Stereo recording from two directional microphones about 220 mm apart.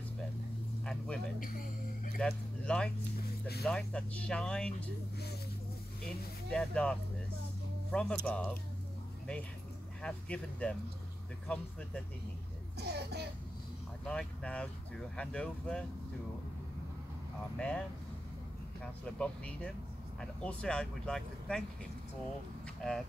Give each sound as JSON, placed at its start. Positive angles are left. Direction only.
{"t": 0.8, "sound": "speech", "side_deg": 5}
{"t": 6.0, "sound": "speech", "side_deg": 5}
{"t": 10.0, "sound": "speech", "side_deg": 5}
{"t": 12.7, "sound": "a child's voice", "side_deg": -50}
{"t": 14.0, "sound": "speech", "side_deg": 5}
{"t": 17.6, "sound": "speech", "side_deg": 5}
{"t": 19.1, "sound": "speech", "side_deg": 5}
{"t": 22.8, "sound": "speech", "side_deg": 0}